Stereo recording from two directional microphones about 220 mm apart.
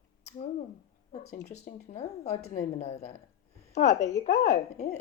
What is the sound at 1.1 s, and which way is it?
A woman's voice, 30° left (ahead or behind).